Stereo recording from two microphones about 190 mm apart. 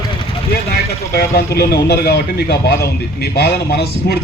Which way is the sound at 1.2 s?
55° left (ahead or behind).